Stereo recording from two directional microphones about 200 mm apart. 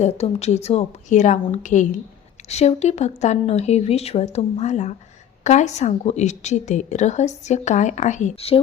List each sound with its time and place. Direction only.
0.0 s a woman's voice: 35° left (ahead or behind)